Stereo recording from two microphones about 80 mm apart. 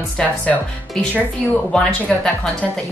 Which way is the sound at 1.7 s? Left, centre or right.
Centre.